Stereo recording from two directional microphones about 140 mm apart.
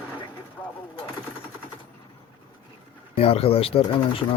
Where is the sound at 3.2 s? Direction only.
45° left (ahead or behind).